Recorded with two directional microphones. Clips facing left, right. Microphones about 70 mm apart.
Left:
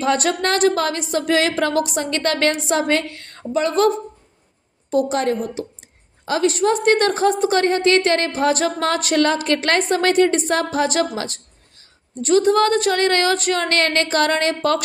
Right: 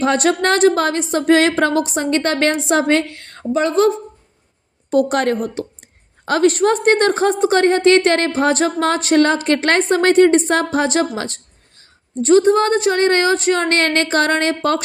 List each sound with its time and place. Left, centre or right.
0.0 s a woman's voice: right
4.9 s a woman's voice: right
6.2 s a woman's voice: right